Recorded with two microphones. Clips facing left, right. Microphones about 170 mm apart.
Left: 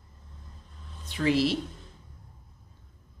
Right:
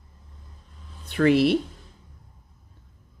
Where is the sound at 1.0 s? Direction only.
60° right (ahead or behind).